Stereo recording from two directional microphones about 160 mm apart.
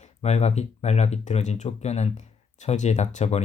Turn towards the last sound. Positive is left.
turn(degrees=45)  # may be behind; listen again after turning